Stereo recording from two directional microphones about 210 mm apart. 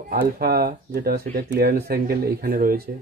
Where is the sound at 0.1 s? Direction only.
45° right (ahead or behind).